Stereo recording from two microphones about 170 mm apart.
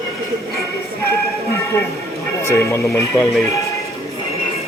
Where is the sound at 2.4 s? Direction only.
15° left (ahead or behind).